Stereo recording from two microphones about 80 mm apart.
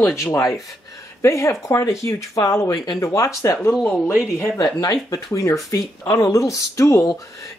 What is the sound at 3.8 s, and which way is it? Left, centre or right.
Speech, centre.